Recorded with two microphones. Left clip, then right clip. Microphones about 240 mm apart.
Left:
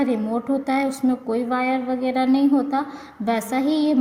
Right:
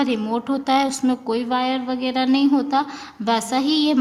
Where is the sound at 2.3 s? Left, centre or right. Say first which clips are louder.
Right 2 dB; right.